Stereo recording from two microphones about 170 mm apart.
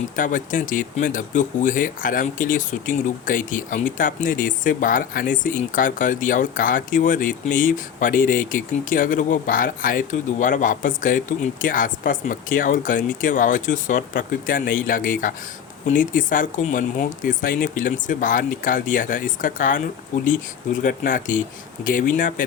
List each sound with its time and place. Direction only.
0.2 s speech: 50° left (ahead or behind)